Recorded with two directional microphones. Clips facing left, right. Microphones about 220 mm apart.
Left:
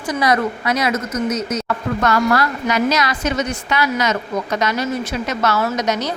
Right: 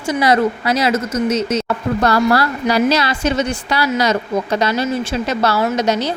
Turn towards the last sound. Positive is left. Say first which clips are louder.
# right 3 dB
turn(degrees=-30)  # may be behind; listen again after turning